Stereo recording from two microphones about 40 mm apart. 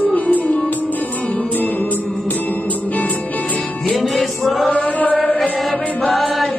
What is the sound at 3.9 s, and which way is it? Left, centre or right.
Music, centre.